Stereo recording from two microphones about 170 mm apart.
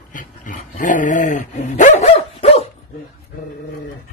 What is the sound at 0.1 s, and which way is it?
Dog, 50° left (ahead or behind).